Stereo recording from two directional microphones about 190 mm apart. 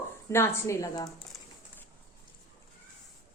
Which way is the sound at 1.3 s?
Centre (ahead or behind).